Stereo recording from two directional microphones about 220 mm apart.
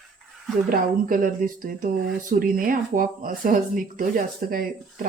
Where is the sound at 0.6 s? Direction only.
40° right (ahead or behind).